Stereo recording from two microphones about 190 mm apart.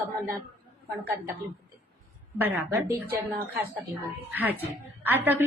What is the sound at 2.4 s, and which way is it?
Speech, 10° right (ahead or behind).